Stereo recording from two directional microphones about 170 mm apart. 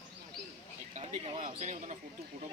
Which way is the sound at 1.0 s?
35° right (ahead or behind).